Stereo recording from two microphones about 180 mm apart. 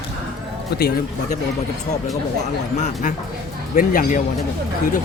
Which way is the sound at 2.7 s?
45° left (ahead or behind).